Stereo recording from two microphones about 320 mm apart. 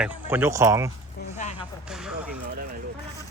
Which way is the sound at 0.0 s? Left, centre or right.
Centre.